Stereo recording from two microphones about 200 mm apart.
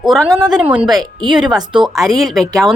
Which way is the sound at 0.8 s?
20° right (ahead or behind).